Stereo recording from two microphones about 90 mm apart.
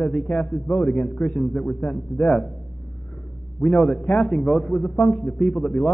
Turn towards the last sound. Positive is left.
turn(degrees=5)  # may be behind; listen again after turning